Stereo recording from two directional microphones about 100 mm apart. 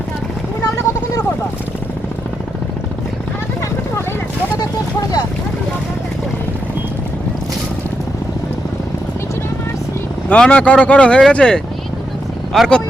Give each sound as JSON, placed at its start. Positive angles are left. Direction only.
{"t": 4.5, "sound": "vehicle", "side_deg": 40}
{"t": 10.2, "sound": "speech", "side_deg": 10}